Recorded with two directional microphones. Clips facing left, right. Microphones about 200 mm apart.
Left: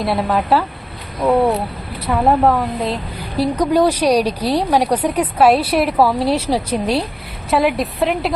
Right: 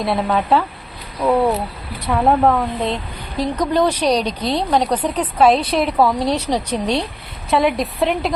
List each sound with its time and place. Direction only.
0.0 s a woman's voice: centre (ahead or behind)